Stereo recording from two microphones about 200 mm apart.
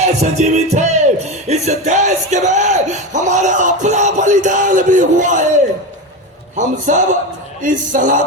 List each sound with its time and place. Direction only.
0.0 s music: 35° right (ahead or behind)
1.5 s a sound: 35° right (ahead or behind)
6.6 s speech: 40° right (ahead or behind)